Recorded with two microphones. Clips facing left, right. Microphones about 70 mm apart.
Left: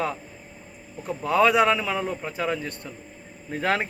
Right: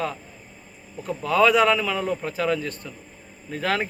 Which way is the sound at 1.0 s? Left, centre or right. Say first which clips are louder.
Right 1 dB; centre.